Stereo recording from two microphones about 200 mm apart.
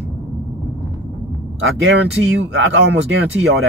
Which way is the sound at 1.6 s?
75° right (ahead or behind).